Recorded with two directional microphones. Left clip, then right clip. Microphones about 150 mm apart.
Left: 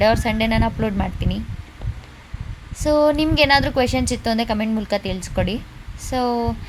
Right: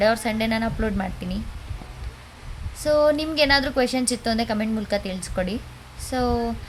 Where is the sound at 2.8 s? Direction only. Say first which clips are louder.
Left 2 dB; 15° left (ahead or behind).